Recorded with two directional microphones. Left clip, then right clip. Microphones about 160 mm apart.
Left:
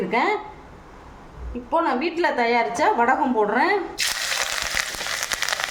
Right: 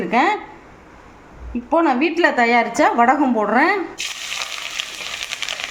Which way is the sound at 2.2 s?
45° right (ahead or behind).